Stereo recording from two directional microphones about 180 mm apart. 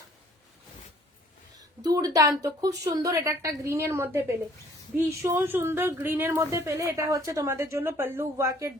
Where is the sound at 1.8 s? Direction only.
20° right (ahead or behind).